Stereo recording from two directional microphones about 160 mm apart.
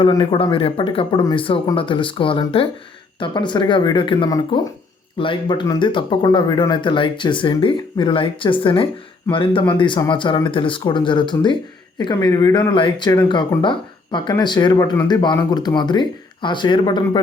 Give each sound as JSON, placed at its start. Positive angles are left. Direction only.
{"t": 0.0, "sound": "speech", "side_deg": 30}